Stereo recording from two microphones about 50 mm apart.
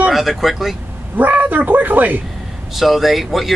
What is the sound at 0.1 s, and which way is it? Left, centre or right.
Speech, centre.